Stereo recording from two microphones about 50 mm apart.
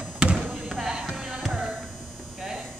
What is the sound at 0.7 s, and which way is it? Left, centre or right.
Music, centre.